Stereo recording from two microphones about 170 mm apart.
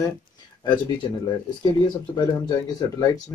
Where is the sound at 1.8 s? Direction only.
25° left (ahead or behind).